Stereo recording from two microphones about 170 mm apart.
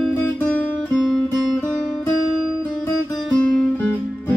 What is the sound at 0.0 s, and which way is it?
Music, 10° left (ahead or behind).